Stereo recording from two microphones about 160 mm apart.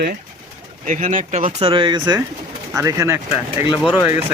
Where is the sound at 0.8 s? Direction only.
55° right (ahead or behind).